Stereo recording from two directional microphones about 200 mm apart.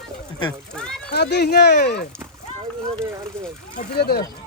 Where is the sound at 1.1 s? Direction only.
55° left (ahead or behind).